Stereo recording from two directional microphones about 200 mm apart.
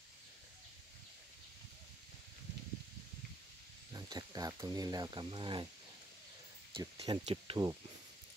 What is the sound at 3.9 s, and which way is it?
Speech, 20° right (ahead or behind).